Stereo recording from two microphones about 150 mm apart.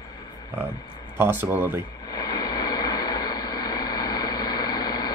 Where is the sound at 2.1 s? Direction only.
25° left (ahead or behind).